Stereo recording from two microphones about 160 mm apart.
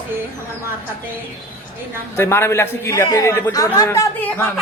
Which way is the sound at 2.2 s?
15° left (ahead or behind).